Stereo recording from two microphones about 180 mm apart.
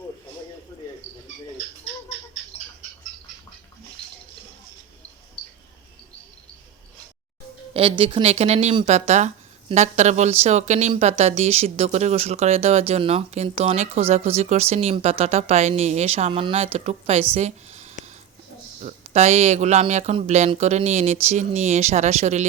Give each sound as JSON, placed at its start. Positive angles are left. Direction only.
{"t": 0.7, "sound": "cricket", "side_deg": 20}
{"t": 7.7, "sound": "speech", "side_deg": -30}
{"t": 17.3, "sound": "a sound", "side_deg": -40}
{"t": 18.8, "sound": "speech", "side_deg": -40}